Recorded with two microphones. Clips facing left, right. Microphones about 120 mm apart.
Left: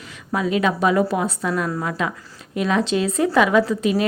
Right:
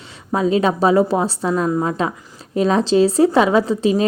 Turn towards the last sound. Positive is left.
turn(degrees=-30)  # may be behind; listen again after turning